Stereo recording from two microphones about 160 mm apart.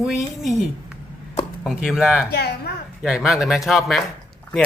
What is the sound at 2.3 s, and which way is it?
Speech, 80° left.